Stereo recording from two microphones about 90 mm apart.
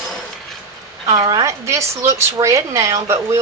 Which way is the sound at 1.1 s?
40° right (ahead or behind).